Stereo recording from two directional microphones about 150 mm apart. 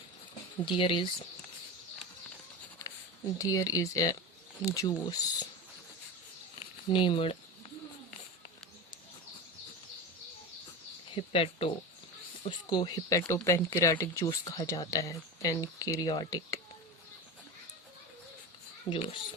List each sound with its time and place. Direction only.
0.6 s speech: 35° left (ahead or behind)
3.3 s speech: 25° left (ahead or behind)
6.9 s speech: 35° left (ahead or behind)
11.1 s speech: 40° left (ahead or behind)
18.9 s speech: 35° left (ahead or behind)